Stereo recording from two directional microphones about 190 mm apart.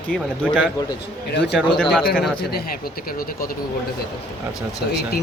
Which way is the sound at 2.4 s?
55° left (ahead or behind).